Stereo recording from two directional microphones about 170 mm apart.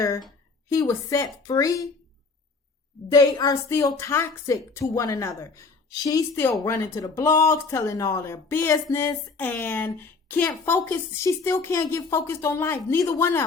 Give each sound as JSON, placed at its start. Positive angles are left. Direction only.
{"t": 0.7, "sound": "a woman's voice", "side_deg": 15}
{"t": 3.1, "sound": "a woman's voice", "side_deg": 20}